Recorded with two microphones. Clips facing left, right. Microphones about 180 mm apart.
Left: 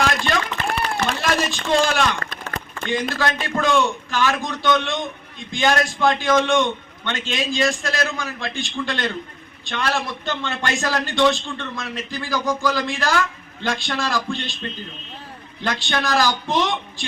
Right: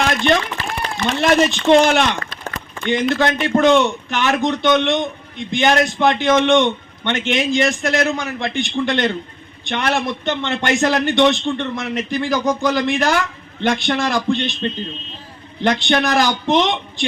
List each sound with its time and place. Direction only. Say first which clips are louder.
1.2 s a man's voice: right 8 dB; 20° right (ahead or behind)
15.6 s a man's voice: right 7 dB; 20° right (ahead or behind)